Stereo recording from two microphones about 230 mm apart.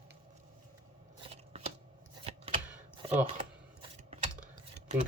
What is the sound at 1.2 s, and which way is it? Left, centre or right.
Scissors, right.